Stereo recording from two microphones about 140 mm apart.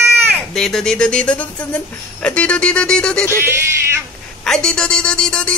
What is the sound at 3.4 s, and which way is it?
Speech, 20° right (ahead or behind).